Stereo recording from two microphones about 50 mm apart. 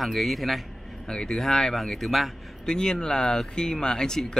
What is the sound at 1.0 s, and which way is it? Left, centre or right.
Speech, centre.